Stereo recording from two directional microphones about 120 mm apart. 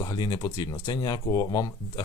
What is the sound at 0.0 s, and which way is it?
Speech, 35° left (ahead or behind).